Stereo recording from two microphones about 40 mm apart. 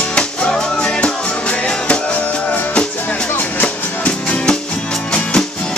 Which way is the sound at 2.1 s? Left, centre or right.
Left.